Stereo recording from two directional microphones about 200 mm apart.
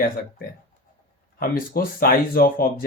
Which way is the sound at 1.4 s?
45° left (ahead or behind).